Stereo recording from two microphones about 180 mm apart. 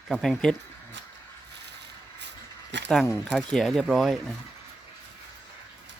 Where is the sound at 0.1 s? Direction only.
Centre (ahead or behind).